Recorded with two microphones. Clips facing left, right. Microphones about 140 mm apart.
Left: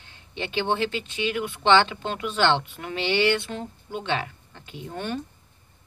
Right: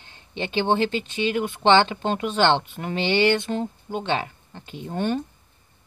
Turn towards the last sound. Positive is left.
turn(degrees=-35)  # may be behind; listen again after turning